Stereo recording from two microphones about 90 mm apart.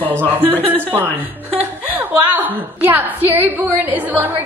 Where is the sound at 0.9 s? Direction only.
20° right (ahead or behind).